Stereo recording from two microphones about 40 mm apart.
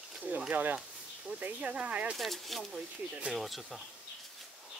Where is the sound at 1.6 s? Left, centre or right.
Right.